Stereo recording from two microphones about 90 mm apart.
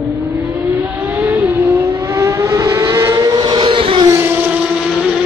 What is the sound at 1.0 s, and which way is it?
Vehicle, 25° right (ahead or behind).